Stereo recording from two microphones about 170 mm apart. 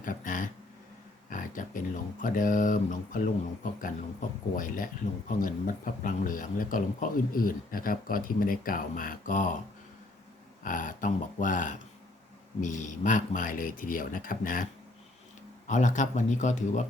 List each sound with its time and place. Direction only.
0.0 s a sound: 50° left (ahead or behind)
2.2 s speech: 50° left (ahead or behind)
10.6 s speech: 50° left (ahead or behind)